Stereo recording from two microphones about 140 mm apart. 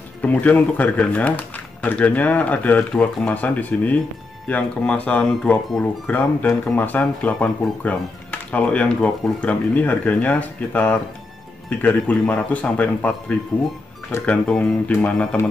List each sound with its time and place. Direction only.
0.2 s speech: 10° left (ahead or behind)